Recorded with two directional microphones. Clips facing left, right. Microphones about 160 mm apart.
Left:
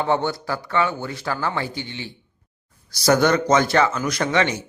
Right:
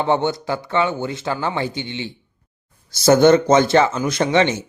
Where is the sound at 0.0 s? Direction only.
20° right (ahead or behind).